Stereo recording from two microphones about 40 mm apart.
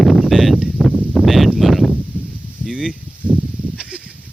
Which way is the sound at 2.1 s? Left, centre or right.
Right.